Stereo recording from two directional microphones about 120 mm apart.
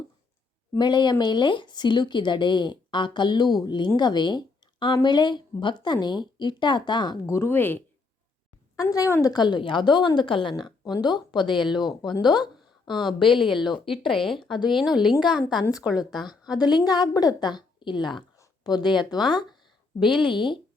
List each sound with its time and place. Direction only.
0.8 s a woman's voice: 40° left (ahead or behind)
7.3 s a woman's voice: 20° left (ahead or behind)
8.7 s a woman's voice: 30° left (ahead or behind)
13.4 s speech: centre (ahead or behind)
16.6 s speech: 35° left (ahead or behind)